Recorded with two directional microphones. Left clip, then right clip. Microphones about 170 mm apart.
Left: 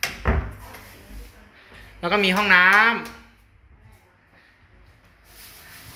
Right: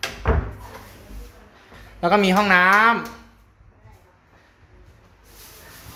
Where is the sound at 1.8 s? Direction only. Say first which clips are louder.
Right 3 dB; 15° right (ahead or behind).